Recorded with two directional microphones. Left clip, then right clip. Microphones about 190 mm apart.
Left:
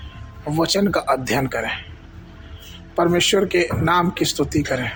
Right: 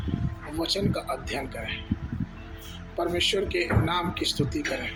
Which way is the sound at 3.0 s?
45° left (ahead or behind).